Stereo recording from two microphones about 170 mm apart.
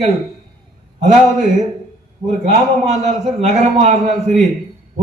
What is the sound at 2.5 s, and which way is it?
A man's voice, 45° right (ahead or behind).